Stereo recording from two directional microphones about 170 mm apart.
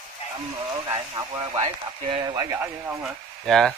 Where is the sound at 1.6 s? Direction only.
35° right (ahead or behind).